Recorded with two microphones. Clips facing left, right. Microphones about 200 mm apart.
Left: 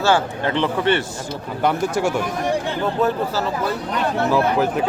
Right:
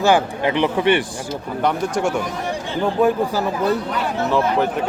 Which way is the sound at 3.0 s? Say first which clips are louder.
Right 4 dB; 15° right (ahead or behind).